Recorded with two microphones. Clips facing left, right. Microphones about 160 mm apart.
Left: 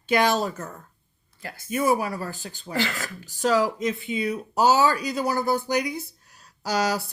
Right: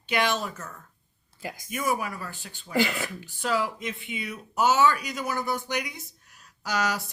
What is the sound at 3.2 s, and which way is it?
Speech, 40° left (ahead or behind).